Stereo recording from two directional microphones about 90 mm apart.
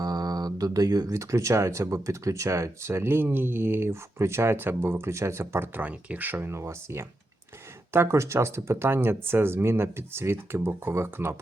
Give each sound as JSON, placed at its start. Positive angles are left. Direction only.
{"t": 0.0, "sound": "speech", "side_deg": -45}